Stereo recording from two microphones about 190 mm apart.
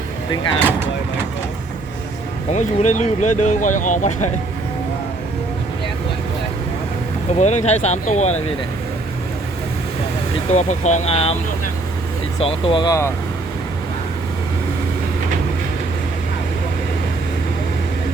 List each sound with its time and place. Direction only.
2.5 s speech: 40° left (ahead or behind)
7.3 s speech: 35° left (ahead or behind)
10.5 s speech: 40° left (ahead or behind)
12.4 s speech: 30° left (ahead or behind)